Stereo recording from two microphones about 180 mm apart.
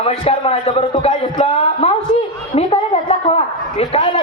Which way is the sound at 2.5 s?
35° left (ahead or behind).